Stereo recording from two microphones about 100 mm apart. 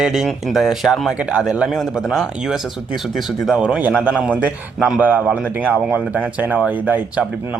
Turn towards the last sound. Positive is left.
turn(degrees=-15)  # may be behind; listen again after turning